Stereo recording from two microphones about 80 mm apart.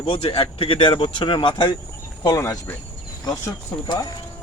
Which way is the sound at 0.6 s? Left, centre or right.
Left.